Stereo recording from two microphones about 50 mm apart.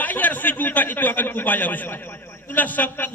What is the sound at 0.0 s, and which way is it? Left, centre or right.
A man's voice, left.